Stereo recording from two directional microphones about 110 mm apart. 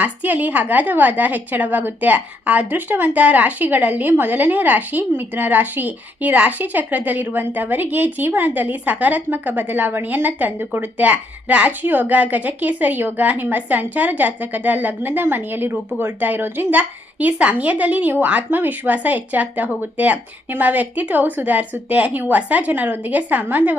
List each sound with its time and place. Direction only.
0.0 s a woman's voice: 15° right (ahead or behind)